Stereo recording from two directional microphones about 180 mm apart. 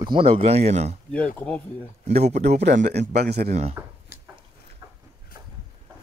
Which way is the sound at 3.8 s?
10° right (ahead or behind).